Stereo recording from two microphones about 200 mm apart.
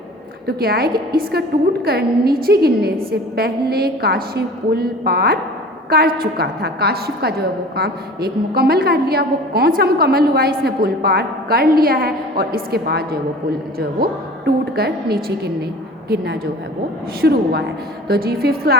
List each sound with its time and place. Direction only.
0.4 s a woman's voice: 50° right (ahead or behind)